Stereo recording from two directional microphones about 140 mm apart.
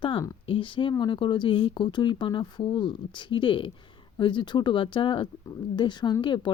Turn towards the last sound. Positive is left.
turn(degrees=35)  # may be behind; listen again after turning